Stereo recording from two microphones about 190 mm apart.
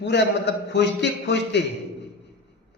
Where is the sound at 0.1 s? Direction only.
65° left (ahead or behind).